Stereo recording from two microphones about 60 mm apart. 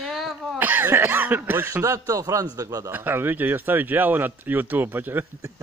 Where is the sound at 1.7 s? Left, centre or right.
Right.